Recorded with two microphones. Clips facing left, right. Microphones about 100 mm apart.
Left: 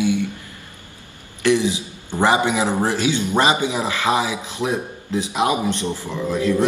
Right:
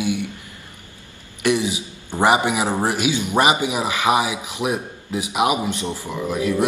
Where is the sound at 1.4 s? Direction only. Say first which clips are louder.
Left 2 dB; 20° right (ahead or behind).